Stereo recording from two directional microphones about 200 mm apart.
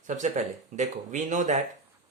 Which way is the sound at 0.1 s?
35° right (ahead or behind).